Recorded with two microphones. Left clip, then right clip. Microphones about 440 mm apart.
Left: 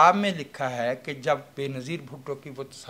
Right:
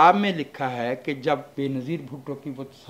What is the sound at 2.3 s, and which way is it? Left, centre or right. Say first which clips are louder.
Speech: left 1 dB; left.